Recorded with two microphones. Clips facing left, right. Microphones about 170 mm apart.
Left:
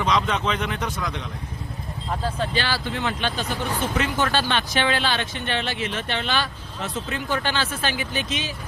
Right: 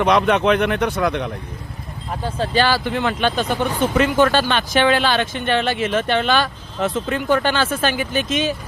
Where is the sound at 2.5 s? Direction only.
50° right (ahead or behind).